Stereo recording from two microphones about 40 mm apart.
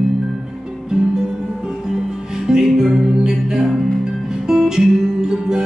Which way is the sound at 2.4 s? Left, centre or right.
Centre.